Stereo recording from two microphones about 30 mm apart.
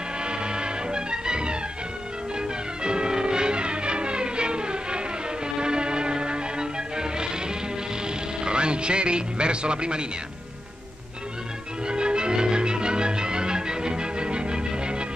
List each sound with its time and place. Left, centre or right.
0.2 s music: right
11.8 s music: right